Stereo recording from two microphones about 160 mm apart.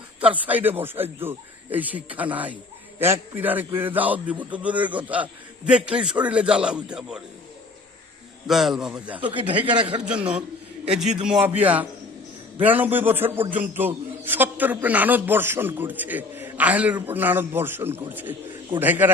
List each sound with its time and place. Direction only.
0.2 s a man's voice: 10° right (ahead or behind)
8.4 s a man's voice: centre (ahead or behind)
9.7 s a man's voice: 30° right (ahead or behind)
10.1 s a man's voice: 5° right (ahead or behind)